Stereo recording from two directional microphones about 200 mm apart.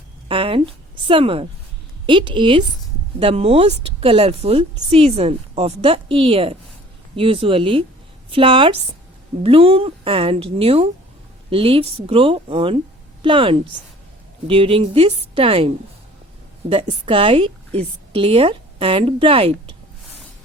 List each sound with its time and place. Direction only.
0.3 s a woman's voice: 25° right (ahead or behind)